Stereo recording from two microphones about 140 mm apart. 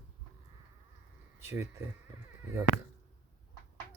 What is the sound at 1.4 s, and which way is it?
Speech, 20° right (ahead or behind).